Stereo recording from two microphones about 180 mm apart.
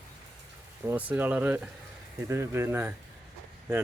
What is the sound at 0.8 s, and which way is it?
Speech, 10° right (ahead or behind).